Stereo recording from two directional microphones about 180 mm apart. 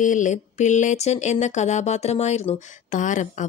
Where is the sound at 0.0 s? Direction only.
45° left (ahead or behind).